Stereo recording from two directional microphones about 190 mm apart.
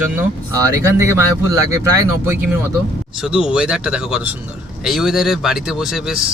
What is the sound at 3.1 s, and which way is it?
Speech, 5° right (ahead or behind).